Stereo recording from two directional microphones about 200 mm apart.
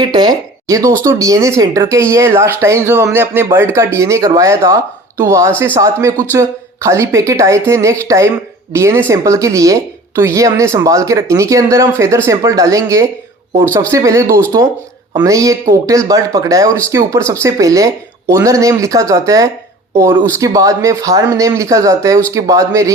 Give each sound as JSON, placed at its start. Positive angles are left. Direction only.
{"t": 0.0, "sound": "speech", "side_deg": -20}